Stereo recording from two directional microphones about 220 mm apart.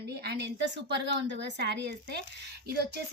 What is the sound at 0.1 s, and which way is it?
Speech, 50° right (ahead or behind).